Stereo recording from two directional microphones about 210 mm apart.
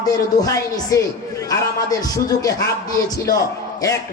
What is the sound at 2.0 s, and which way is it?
Speech, 15° left (ahead or behind).